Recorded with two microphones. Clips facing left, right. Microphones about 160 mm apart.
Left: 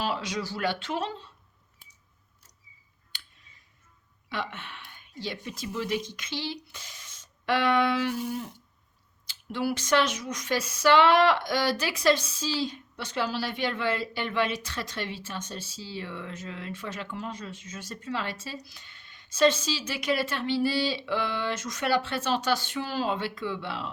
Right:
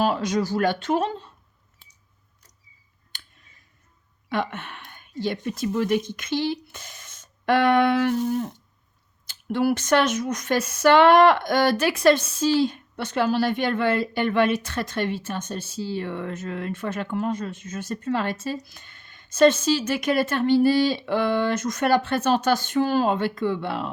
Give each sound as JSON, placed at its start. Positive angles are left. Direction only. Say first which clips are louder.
{"t": 0.0, "sound": "speech", "louder": "right 8 dB", "side_deg": -45}
{"t": 3.1, "sound": "a sound", "louder": "right 2 dB", "side_deg": -50}
{"t": 4.3, "sound": "speech", "louder": "right 8 dB", "side_deg": -50}